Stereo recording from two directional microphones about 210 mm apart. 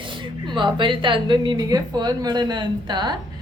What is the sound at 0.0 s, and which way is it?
Speech, 25° right (ahead or behind).